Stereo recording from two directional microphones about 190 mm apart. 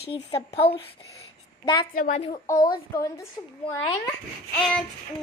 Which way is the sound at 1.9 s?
45° left (ahead or behind).